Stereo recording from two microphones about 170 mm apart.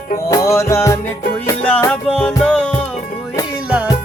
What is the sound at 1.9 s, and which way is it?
Music, 5° left (ahead or behind).